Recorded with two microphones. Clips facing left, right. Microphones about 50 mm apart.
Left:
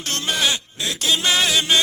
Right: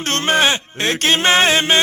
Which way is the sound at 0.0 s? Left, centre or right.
Right.